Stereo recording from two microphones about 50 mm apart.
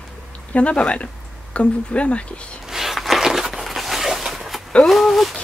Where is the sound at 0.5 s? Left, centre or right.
Left.